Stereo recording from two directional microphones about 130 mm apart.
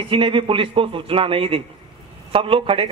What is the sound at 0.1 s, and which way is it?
Speech, 40° right (ahead or behind).